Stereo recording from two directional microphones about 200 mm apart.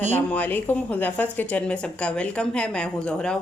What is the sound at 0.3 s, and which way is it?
A woman's voice, 10° left (ahead or behind).